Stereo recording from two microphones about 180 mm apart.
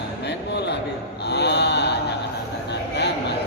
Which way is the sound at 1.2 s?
70° left (ahead or behind).